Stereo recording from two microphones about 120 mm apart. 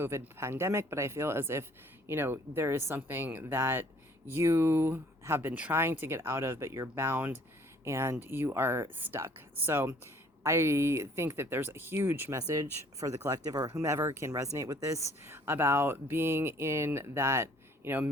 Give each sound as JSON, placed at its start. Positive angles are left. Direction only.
{"t": 0.0, "sound": "speech", "side_deg": -20}
{"t": 12.4, "sound": "speech", "side_deg": -30}